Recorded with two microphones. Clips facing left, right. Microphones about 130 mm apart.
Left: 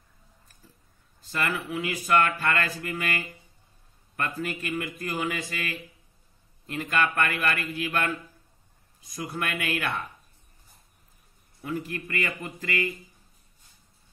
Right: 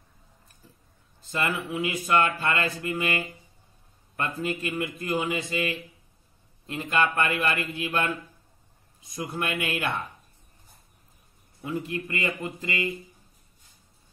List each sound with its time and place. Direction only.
1.2 s speech: 25° right (ahead or behind)
4.4 s speech: 25° right (ahead or behind)
9.1 s speech: 25° right (ahead or behind)
11.6 s speech: 25° right (ahead or behind)